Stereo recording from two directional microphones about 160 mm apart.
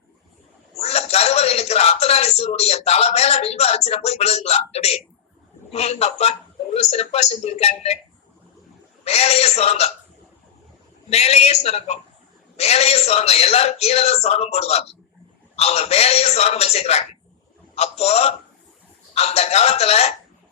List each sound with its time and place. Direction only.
0.8 s a man's voice: 40° left (ahead or behind)
9.0 s a man's voice: 40° left (ahead or behind)
11.1 s a man's voice: 40° left (ahead or behind)